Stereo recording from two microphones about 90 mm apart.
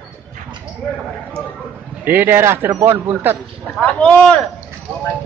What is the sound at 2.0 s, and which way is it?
A man's voice, 25° right (ahead or behind).